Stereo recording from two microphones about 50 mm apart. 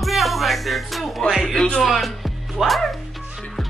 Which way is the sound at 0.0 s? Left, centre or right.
Centre.